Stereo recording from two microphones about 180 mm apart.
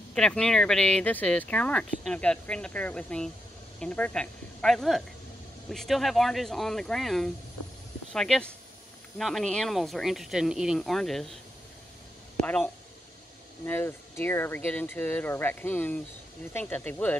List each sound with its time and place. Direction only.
0.1 s speech: 5° left (ahead or behind)
12.4 s speech: 10° left (ahead or behind)